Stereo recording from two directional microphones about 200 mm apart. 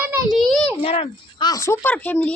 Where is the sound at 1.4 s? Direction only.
15° left (ahead or behind).